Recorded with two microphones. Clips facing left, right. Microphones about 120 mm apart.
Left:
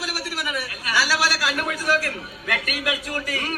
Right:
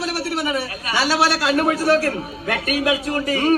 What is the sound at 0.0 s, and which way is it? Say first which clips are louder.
A man's voice: right 7 dB; 30° right (ahead or behind).